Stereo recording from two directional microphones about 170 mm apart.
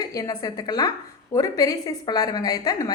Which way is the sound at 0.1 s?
20° left (ahead or behind).